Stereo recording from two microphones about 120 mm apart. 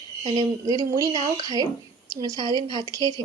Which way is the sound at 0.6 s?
30° right (ahead or behind).